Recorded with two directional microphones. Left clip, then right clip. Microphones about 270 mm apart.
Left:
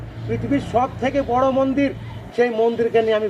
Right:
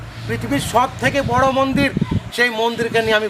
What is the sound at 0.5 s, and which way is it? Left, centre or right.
Speech, right.